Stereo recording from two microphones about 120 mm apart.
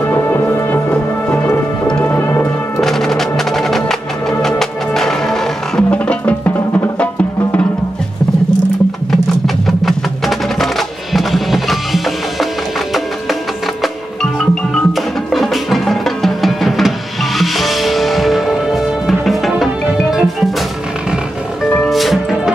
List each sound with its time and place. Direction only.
0.0 s music: 15° left (ahead or behind)
2.8 s music: centre (ahead or behind)
9.7 s music: centre (ahead or behind)
14.4 s music: centre (ahead or behind)
21.8 s music: centre (ahead or behind)